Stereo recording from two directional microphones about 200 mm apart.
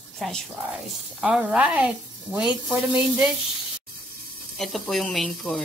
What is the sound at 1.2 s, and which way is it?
Speech, 5° right (ahead or behind).